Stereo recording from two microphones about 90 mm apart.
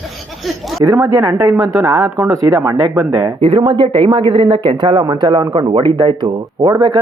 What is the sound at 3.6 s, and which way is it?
A woman's voice, 65° right (ahead or behind).